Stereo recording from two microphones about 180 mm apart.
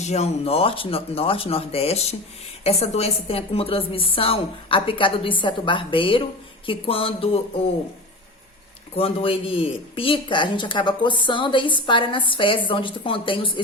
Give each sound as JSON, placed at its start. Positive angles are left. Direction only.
{"t": 0.0, "sound": "a woman's voice", "side_deg": 40}
{"t": 9.0, "sound": "speech", "side_deg": 30}